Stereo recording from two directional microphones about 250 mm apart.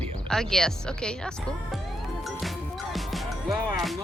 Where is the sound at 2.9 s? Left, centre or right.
Centre.